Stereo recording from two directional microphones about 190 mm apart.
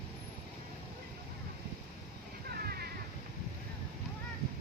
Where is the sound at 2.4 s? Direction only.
55° right (ahead or behind).